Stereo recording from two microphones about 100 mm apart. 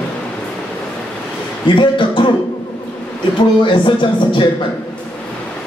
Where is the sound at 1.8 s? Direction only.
55° left (ahead or behind).